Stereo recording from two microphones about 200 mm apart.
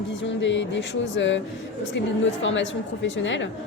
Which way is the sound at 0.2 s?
65° left (ahead or behind).